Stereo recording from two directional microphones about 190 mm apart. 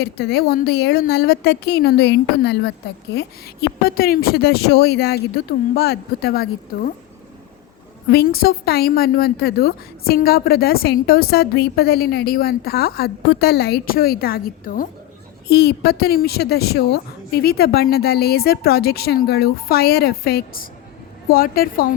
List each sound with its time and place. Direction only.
0.0 s a woman's voice: 55° left (ahead or behind)
8.1 s a woman's voice: 55° left (ahead or behind)
15.4 s a woman's voice: 55° left (ahead or behind)